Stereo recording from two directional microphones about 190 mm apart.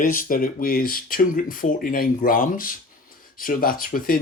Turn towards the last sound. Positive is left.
turn(degrees=50)  # may be behind; listen again after turning